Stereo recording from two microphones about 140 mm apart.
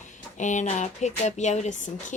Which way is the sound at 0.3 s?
60° left (ahead or behind).